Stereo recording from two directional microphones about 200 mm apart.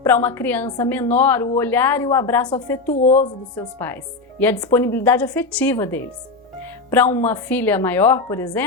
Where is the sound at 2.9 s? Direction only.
35° left (ahead or behind).